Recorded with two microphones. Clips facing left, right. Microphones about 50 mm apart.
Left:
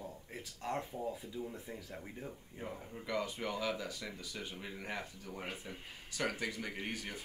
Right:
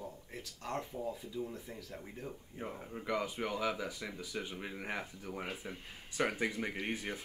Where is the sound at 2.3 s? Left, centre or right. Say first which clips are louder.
Right 2 dB; centre.